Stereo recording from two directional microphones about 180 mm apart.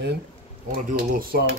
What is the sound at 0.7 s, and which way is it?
Speech, 55° right (ahead or behind).